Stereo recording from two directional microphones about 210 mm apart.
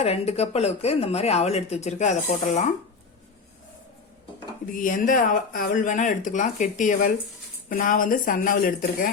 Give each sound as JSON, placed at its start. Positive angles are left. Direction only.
{"t": 0.0, "sound": "speech", "side_deg": 30}
{"t": 4.6, "sound": "speech", "side_deg": 40}